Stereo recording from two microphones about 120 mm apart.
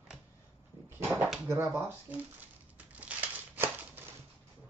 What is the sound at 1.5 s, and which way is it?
Speech, 20° right (ahead or behind).